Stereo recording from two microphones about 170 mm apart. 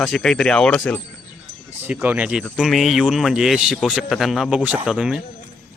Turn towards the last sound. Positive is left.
turn(degrees=-5)  # may be behind; listen again after turning